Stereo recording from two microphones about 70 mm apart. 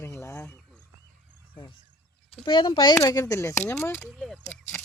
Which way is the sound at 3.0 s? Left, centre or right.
Left.